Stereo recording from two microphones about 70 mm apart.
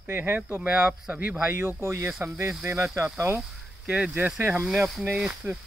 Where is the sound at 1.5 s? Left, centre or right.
Right.